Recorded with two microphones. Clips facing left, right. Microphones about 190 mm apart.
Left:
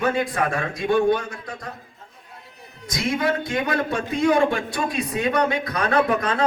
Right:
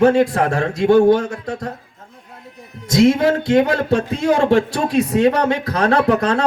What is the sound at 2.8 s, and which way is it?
Speech, 70° right (ahead or behind).